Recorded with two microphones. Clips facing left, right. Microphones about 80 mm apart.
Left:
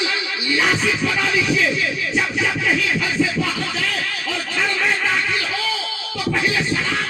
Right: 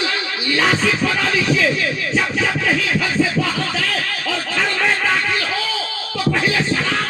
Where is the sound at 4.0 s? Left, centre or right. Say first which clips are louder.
Right 2 dB; right.